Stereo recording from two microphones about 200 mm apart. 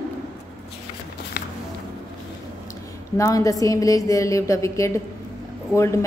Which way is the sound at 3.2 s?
15° left (ahead or behind).